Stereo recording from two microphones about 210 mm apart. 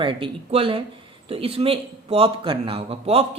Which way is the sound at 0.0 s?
25° right (ahead or behind).